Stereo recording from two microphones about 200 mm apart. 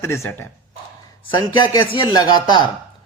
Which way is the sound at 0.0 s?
15° left (ahead or behind).